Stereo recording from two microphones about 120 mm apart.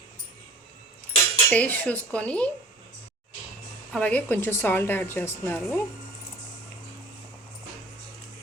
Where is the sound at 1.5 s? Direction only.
15° left (ahead or behind).